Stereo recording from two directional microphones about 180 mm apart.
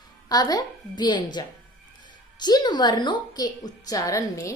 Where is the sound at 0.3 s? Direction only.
20° left (ahead or behind).